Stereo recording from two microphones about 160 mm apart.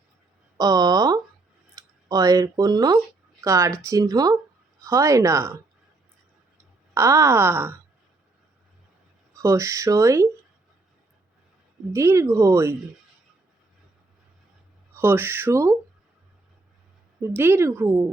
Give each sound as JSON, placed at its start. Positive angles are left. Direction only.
{"t": 0.5, "sound": "a sound", "side_deg": -25}
{"t": 1.7, "sound": "speech", "side_deg": -20}
{"t": 6.9, "sound": "speech", "side_deg": -20}
{"t": 9.4, "sound": "speech", "side_deg": -20}
{"t": 11.9, "sound": "speech", "side_deg": -15}
{"t": 14.9, "sound": "speech", "side_deg": -15}
{"t": 17.2, "sound": "speech", "side_deg": -15}